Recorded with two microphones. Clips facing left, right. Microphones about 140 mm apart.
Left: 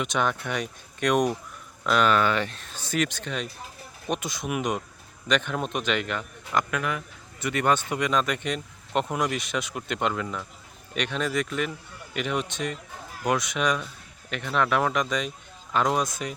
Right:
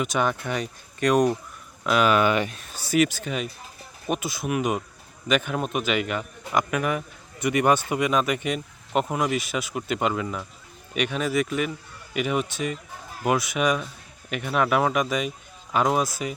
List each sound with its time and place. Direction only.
0.0 s a man's voice: 5° right (ahead or behind)